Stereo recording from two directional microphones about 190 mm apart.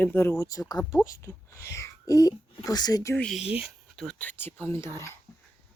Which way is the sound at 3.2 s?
Centre (ahead or behind).